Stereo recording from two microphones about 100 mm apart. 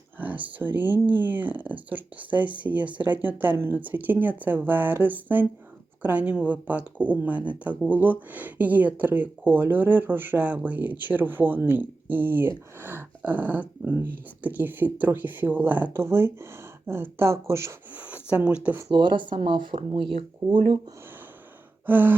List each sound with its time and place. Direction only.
0.2 s speech: 15° right (ahead or behind)
17.9 s speech: 15° right (ahead or behind)
18.9 s speech: 50° right (ahead or behind); by 20.7 s 65° right (ahead or behind)
21.8 s speech: 20° right (ahead or behind)